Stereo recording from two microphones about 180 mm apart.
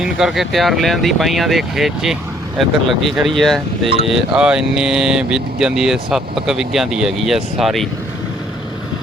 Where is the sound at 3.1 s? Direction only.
Centre (ahead or behind).